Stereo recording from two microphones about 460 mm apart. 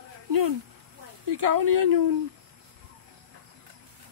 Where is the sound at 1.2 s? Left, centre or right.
Right.